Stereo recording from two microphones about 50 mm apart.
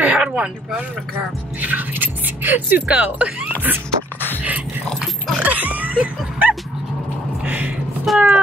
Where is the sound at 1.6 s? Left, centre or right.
Right.